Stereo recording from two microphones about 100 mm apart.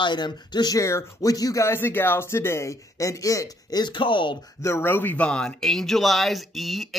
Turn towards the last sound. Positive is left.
turn(degrees=0)  # may be behind; listen again after turning